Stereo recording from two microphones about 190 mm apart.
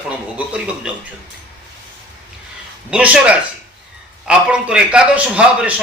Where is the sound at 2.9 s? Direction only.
5° right (ahead or behind).